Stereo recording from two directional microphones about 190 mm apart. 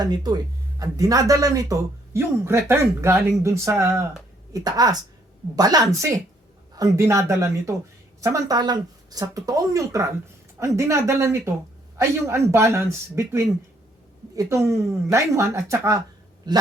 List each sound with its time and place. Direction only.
0.0 s a woman's voice: 20° right (ahead or behind)